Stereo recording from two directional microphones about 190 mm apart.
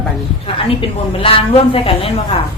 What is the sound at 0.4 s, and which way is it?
A woman's voice, 30° left (ahead or behind).